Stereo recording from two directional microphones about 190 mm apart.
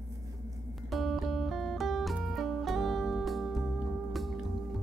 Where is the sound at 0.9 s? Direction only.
Centre (ahead or behind).